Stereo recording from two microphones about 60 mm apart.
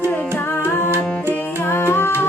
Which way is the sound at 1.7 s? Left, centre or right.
Left.